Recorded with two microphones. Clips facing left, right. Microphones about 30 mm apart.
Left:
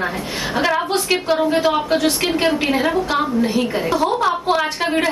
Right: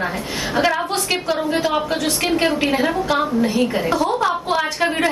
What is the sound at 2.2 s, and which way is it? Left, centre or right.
A woman's voice, centre.